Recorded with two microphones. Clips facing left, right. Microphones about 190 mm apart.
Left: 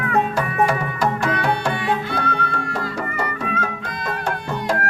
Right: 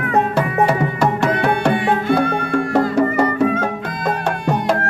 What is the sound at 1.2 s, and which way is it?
Music, 60° right (ahead or behind).